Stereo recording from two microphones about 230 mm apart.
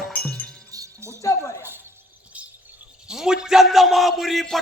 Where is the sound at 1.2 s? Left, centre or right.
Centre.